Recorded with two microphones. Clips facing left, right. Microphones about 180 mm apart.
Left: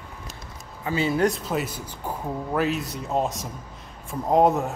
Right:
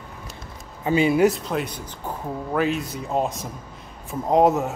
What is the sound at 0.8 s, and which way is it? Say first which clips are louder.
Speech: right 5 dB; 15° right (ahead or behind).